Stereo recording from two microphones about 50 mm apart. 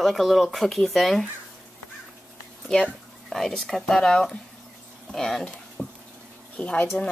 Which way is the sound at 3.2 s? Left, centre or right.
Centre.